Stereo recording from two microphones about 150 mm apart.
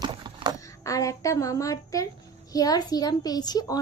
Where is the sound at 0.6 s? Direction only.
20° left (ahead or behind).